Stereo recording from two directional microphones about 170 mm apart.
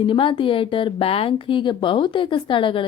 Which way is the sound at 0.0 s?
30° left (ahead or behind).